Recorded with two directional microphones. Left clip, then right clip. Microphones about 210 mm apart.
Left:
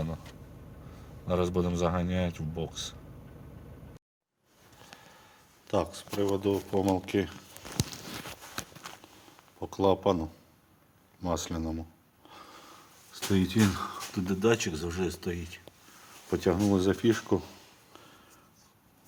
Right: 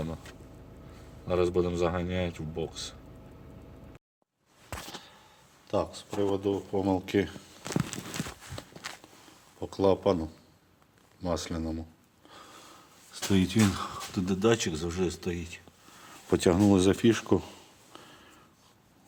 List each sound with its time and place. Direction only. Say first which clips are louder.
1.3 s speech: right 2 dB; centre (ahead or behind)
5.6 s speech: even; 15° left (ahead or behind)
6.4 s speech: left 1 dB; 15° left (ahead or behind)
7.0 s speech: right 2 dB; 10° right (ahead or behind)
8.9 s walk: right 4 dB; 10° right (ahead or behind)
9.6 s speech: right 1 dB; 5° right (ahead or behind)
12.3 s a sound: even; centre (ahead or behind)
13.1 s speech: right 1 dB; 15° right (ahead or behind)
16.3 s speech: right 3 dB; 35° right (ahead or behind)